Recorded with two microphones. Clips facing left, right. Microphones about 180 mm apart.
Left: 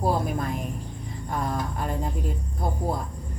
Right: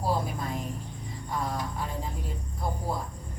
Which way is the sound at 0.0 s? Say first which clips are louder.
Left 4 dB; 55° left (ahead or behind).